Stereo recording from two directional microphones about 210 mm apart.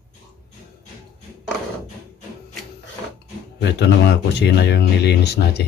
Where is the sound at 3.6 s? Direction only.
55° left (ahead or behind).